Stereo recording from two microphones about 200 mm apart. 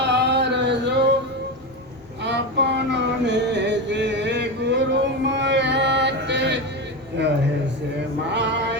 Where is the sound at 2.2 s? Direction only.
60° right (ahead or behind).